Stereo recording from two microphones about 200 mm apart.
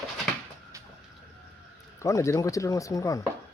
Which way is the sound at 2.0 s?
15° left (ahead or behind).